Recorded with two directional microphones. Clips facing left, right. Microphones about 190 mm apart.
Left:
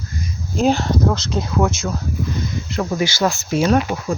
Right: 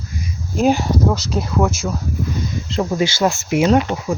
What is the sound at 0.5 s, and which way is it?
Speech, 10° right (ahead or behind).